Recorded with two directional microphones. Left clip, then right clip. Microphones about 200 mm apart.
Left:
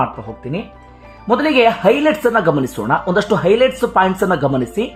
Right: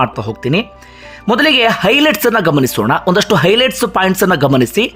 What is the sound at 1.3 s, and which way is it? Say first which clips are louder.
A man's voice: right 2 dB; 25° right (ahead or behind).